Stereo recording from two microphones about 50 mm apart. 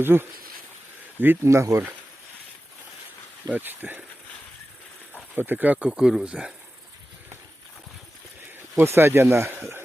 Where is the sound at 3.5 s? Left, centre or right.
Right.